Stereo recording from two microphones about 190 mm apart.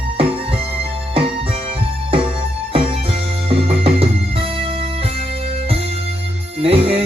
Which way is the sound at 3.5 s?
30° right (ahead or behind).